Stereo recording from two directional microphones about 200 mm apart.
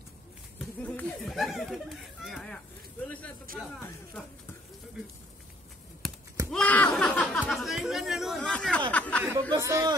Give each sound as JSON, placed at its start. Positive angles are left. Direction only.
{"t": 0.6, "sound": "speech", "side_deg": 5}
{"t": 3.5, "sound": "speech", "side_deg": -45}
{"t": 3.8, "sound": "speech", "side_deg": 5}
{"t": 6.0, "sound": "a sound", "side_deg": 0}
{"t": 6.5, "sound": "speech", "side_deg": 10}
{"t": 9.5, "sound": "speech", "side_deg": -15}